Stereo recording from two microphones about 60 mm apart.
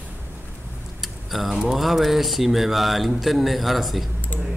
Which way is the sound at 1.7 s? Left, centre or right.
Centre.